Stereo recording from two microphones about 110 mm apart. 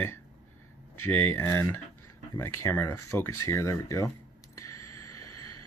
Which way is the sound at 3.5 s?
25° left (ahead or behind).